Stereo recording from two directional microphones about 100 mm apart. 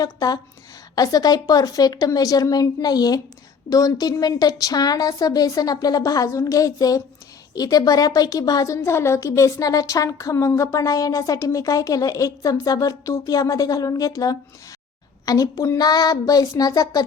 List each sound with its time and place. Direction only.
0.0 s a woman's voice: 40° left (ahead or behind)